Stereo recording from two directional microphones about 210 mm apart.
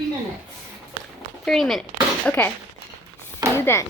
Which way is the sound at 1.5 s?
Centre (ahead or behind).